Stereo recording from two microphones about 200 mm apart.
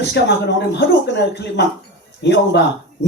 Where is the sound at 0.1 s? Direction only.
55° left (ahead or behind).